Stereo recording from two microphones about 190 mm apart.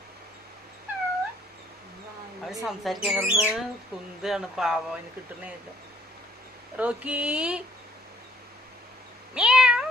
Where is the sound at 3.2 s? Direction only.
10° right (ahead or behind).